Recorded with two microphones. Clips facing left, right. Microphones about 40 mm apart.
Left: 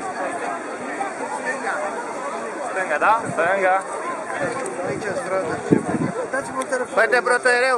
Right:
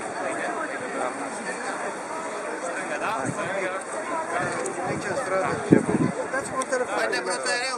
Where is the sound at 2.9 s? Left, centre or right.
Left.